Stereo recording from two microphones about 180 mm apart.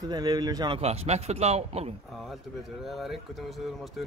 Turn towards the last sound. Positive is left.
turn(degrees=0)  # may be behind; listen again after turning